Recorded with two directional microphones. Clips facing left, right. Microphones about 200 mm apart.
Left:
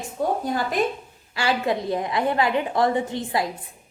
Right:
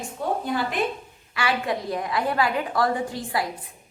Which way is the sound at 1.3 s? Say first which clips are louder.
Left 2 dB; 25° left (ahead or behind).